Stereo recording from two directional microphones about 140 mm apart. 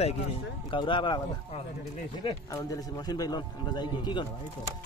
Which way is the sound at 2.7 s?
25° left (ahead or behind).